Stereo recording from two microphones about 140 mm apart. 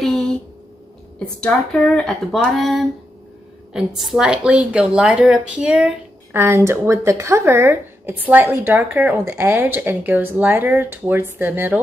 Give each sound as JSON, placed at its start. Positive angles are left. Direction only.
{"t": 0.0, "sound": "a sound", "side_deg": 0}
{"t": 1.4, "sound": "a woman's voice", "side_deg": 5}
{"t": 6.3, "sound": "a woman's voice", "side_deg": -15}